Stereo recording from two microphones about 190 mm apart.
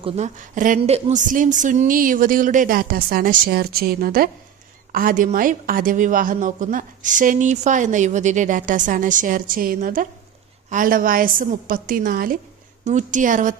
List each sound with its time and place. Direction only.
0.0 s a woman's voice: 40° right (ahead or behind)
0.8 s a woman's voice: 35° right (ahead or behind)